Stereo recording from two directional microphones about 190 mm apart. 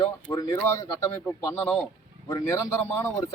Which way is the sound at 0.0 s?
15° left (ahead or behind).